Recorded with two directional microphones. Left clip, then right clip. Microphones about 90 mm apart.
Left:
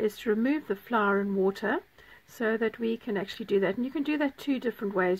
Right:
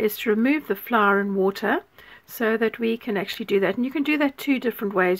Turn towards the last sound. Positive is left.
turn(degrees=-30)  # may be behind; listen again after turning